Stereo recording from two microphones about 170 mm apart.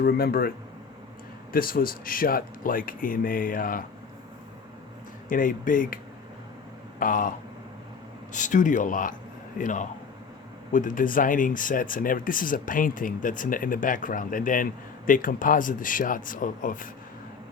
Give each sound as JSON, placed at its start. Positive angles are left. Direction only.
{"t": 0.0, "sound": "speech", "side_deg": 65}
{"t": 1.5, "sound": "speech", "side_deg": 60}
{"t": 5.3, "sound": "speech", "side_deg": 50}
{"t": 7.0, "sound": "speech", "side_deg": 50}